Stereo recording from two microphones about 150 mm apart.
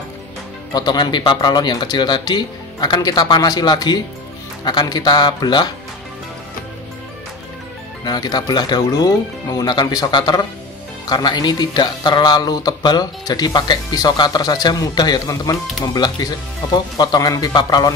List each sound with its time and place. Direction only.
0.7 s speech: 30° left (ahead or behind)
8.0 s speech: 25° left (ahead or behind)